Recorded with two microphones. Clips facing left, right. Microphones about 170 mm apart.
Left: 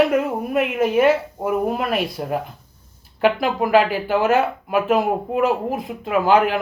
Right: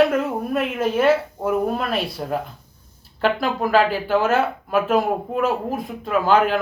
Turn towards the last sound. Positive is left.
turn(degrees=15)  # may be behind; listen again after turning